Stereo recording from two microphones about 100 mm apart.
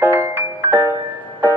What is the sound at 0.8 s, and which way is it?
Music, 30° right (ahead or behind).